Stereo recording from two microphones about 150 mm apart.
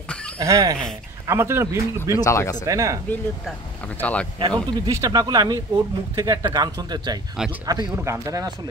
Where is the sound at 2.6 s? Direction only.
20° right (ahead or behind).